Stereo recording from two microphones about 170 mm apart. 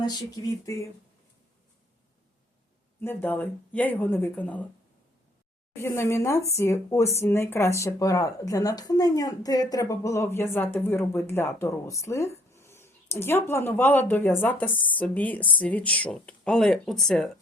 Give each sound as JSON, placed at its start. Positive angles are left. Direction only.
{"t": 0.0, "sound": "speech", "side_deg": 25}
{"t": 3.0, "sound": "speech", "side_deg": 10}
{"t": 5.7, "sound": "speech", "side_deg": 15}